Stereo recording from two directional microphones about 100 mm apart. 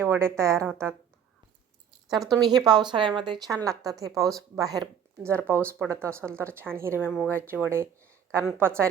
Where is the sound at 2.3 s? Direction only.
40° right (ahead or behind).